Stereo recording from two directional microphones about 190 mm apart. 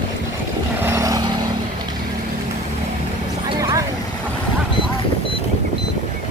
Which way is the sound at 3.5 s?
20° right (ahead or behind).